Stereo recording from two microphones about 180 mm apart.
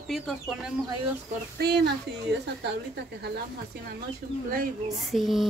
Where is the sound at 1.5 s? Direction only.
65° right (ahead or behind).